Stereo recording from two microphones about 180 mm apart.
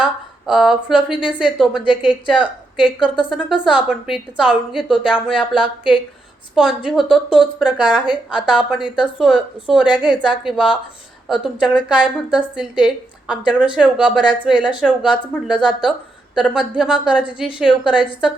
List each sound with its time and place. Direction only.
0.0 s a woman's voice: 5° right (ahead or behind)